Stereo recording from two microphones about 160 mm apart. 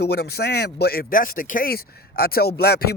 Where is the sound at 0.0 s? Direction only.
85° left.